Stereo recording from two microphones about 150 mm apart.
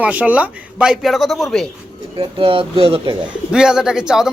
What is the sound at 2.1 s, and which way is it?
Speech, 35° right (ahead or behind).